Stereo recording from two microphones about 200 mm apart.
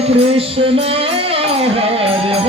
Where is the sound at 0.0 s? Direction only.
30° right (ahead or behind).